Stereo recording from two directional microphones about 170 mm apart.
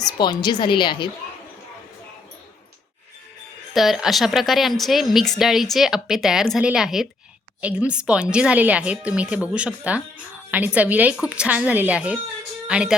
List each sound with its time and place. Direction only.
0.0 s a woman's voice: 25° left (ahead or behind)
3.8 s a woman's voice: centre (ahead or behind)